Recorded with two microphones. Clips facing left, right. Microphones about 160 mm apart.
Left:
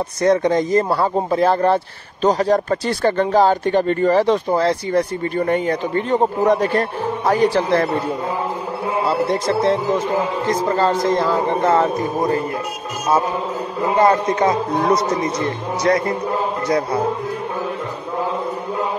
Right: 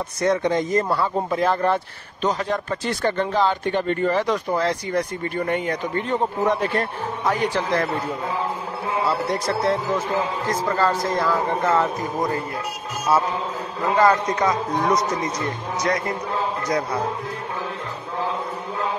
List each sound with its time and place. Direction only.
0.2 s speech: 35° left (ahead or behind)
9.0 s a man's voice: 25° left (ahead or behind)
13.8 s a man's voice: 25° left (ahead or behind)